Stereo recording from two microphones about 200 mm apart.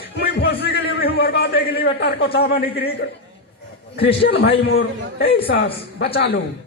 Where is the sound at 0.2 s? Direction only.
55° left (ahead or behind).